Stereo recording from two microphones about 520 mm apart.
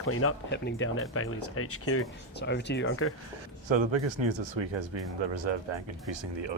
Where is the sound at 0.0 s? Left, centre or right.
Left.